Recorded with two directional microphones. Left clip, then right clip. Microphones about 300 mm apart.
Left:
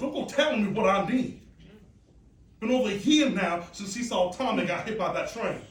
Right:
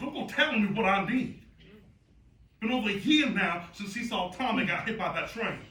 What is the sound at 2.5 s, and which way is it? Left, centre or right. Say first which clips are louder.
Speech: left 4 dB; centre.